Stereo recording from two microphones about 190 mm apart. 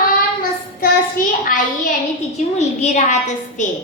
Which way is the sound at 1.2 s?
45° left (ahead or behind).